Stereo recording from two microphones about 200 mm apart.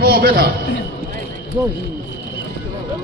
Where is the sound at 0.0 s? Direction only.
50° right (ahead or behind).